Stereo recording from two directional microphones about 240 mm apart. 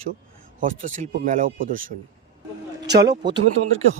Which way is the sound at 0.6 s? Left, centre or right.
Right.